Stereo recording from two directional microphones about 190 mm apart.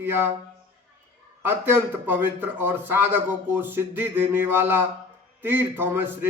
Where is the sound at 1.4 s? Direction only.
10° right (ahead or behind).